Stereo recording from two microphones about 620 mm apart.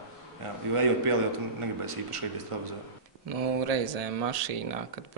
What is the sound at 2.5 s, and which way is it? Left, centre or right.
Mantra, right.